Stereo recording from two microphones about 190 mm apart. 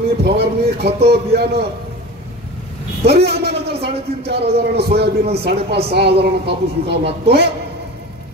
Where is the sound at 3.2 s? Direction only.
60° right (ahead or behind).